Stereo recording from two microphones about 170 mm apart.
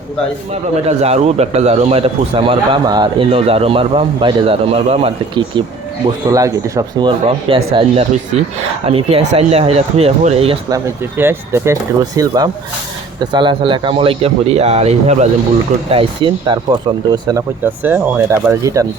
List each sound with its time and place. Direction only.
0.5 s speech: 40° right (ahead or behind)
2.8 s speech: 25° right (ahead or behind)
6.3 s speech: 20° right (ahead or behind)
7.3 s speech: 35° right (ahead or behind)
10.7 s speech: 15° right (ahead or behind); by 16.6 s 30° right (ahead or behind)
17.2 s speech: 15° right (ahead or behind)